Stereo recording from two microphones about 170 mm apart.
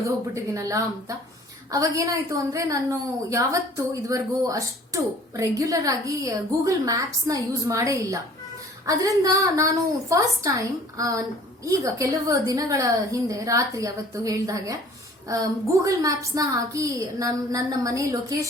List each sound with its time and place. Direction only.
0.3 s a woman's voice: 20° right (ahead or behind)